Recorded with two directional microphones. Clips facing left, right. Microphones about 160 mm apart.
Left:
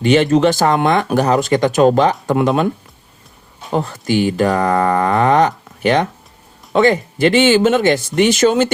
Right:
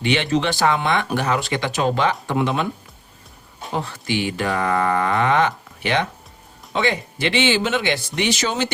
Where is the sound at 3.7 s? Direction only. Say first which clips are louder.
Left 7 dB; 45° left (ahead or behind).